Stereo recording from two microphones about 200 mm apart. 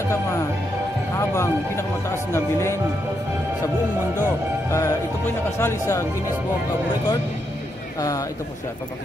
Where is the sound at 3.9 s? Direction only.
10° right (ahead or behind).